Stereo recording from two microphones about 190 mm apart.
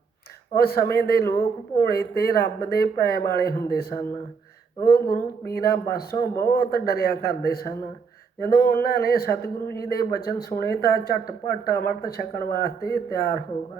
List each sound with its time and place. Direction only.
0.6 s a man's voice: 55° left (ahead or behind)
1.2 s a woman's voice: 15° left (ahead or behind)
1.8 s a man's voice: 55° left (ahead or behind)
6.3 s a woman's voice: 15° left (ahead or behind)
6.6 s a man's voice: 55° left (ahead or behind)